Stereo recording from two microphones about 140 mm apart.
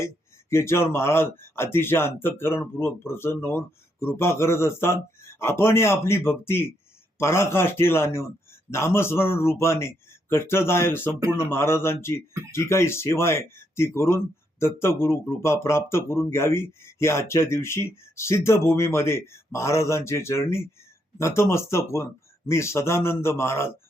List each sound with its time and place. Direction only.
0.5 s a man's voice: 20° left (ahead or behind)